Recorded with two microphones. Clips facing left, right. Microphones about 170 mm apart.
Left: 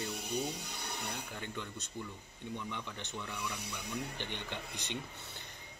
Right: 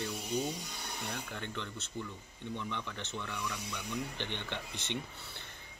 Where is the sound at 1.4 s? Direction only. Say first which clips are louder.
Right 1 dB; 15° left (ahead or behind).